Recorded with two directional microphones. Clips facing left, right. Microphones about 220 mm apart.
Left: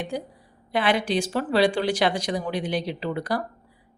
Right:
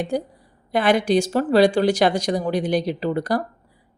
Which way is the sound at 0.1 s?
45° right (ahead or behind).